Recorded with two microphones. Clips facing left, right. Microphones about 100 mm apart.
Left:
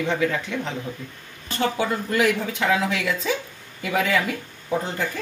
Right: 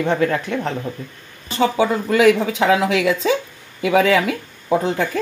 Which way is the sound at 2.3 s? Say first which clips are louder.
Right 6 dB; 90° right.